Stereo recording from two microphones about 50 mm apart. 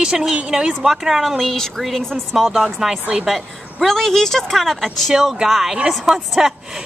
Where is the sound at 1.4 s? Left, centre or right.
Centre.